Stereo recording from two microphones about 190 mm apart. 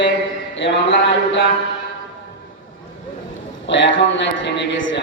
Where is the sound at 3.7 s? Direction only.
70° left (ahead or behind).